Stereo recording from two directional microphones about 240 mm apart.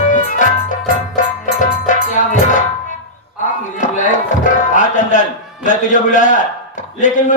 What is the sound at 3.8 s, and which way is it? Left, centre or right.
A man's voice, left.